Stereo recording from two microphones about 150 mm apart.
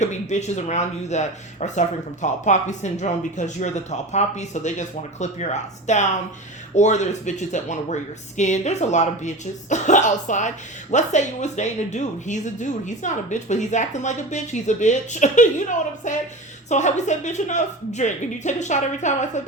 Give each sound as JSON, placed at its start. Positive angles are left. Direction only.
{"t": 0.0, "sound": "speech", "side_deg": 50}